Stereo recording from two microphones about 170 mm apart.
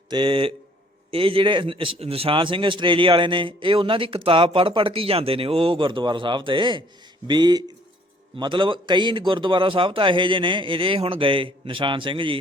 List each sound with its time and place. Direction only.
0.1 s a man's voice: 30° right (ahead or behind)